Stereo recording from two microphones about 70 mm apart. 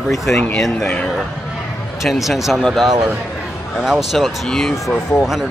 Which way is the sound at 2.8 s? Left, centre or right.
Right.